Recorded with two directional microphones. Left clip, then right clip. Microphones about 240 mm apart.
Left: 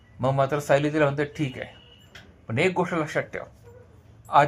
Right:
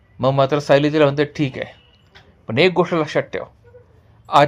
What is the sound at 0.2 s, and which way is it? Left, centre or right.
Speech, right.